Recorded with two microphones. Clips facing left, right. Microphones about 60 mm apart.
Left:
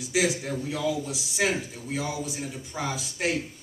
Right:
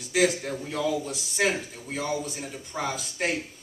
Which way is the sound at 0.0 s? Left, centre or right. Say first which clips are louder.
Right 2 dB; centre.